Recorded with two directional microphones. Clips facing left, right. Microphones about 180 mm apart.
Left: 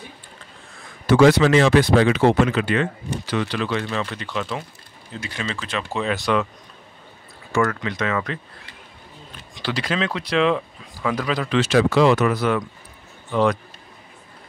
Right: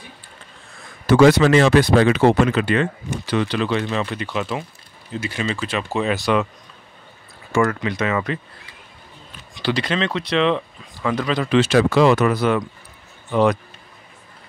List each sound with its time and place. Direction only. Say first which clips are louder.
1.1 s speech: right 1 dB; 50° right (ahead or behind)
3.3 s speech: right 3 dB; 25° right (ahead or behind)
4.2 s speech: right 3 dB; 10° right (ahead or behind)
7.8 s speech: right 3 dB; 10° right (ahead or behind)
9.6 s speech: right 3 dB; centre (ahead or behind)
11.7 s speech: even; 50° right (ahead or behind)
12.3 s speech: right 2 dB; 25° right (ahead or behind)